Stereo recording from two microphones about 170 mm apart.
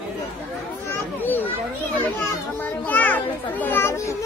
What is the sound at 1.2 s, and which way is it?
A child's voice, 10° left (ahead or behind).